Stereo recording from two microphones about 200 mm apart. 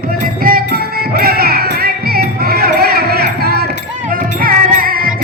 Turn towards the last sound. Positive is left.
turn(degrees=-45)  # may be behind; listen again after turning